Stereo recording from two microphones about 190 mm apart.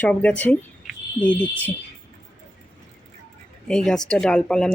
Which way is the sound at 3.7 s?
5° left (ahead or behind).